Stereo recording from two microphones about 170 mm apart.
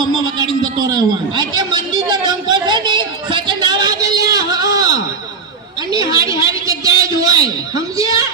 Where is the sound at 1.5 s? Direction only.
25° right (ahead or behind).